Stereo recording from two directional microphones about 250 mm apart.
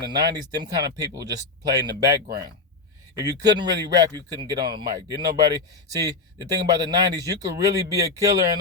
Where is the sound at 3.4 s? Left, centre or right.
Centre.